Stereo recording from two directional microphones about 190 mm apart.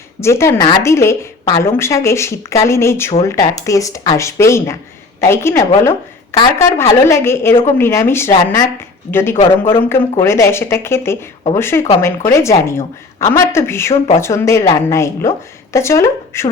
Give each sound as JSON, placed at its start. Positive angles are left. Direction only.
{"t": 0.2, "sound": "a woman's voice", "side_deg": 15}
{"t": 9.4, "sound": "speech", "side_deg": 30}
{"t": 9.9, "sound": "a woman's voice", "side_deg": 15}